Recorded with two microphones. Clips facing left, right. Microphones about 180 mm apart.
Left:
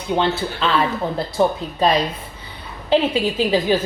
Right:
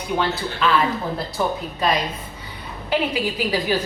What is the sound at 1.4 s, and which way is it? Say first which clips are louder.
Speech: left 6 dB; 30° left (ahead or behind).